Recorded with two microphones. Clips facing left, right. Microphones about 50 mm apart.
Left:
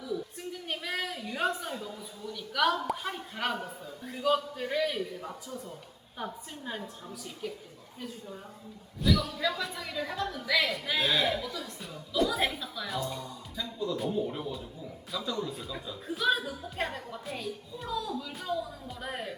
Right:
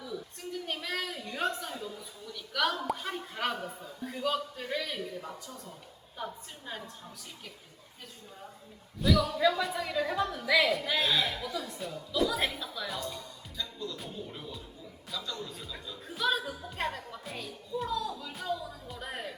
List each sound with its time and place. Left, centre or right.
0.1 s a sound: centre
2.3 s a woman's voice: centre
9.0 s a woman's voice: centre